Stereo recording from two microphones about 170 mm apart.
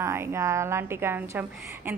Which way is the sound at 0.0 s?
15° right (ahead or behind).